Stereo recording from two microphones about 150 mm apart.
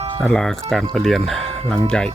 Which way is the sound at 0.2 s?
5° left (ahead or behind).